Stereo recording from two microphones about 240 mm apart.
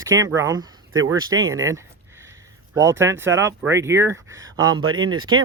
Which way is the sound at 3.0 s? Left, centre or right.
Centre.